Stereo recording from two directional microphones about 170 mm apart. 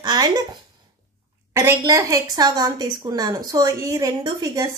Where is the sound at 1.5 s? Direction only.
20° right (ahead or behind).